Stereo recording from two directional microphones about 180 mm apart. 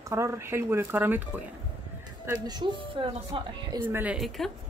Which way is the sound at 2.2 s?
25° right (ahead or behind).